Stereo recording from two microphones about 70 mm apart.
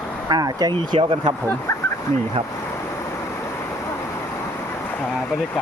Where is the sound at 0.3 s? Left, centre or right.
Right.